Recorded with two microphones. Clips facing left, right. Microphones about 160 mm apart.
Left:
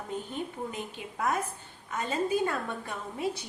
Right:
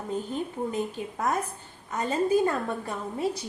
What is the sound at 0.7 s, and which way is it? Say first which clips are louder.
A woman's voice: right 8 dB; 40° right (ahead or behind).